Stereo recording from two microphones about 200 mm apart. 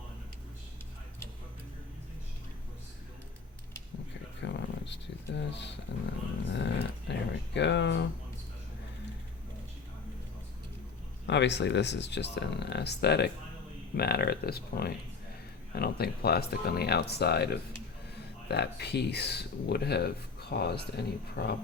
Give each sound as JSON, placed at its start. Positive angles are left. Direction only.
{"t": 4.4, "sound": "a sound", "side_deg": 60}
{"t": 6.5, "sound": "dog", "side_deg": 60}
{"t": 11.3, "sound": "speech", "side_deg": 60}